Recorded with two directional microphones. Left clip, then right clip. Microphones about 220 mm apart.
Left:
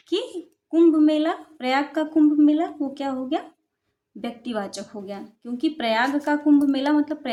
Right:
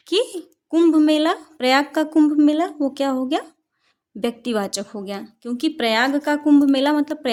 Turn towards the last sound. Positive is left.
turn(degrees=-50)  # may be behind; listen again after turning